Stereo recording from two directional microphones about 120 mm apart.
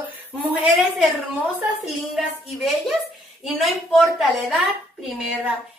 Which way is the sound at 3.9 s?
Centre (ahead or behind).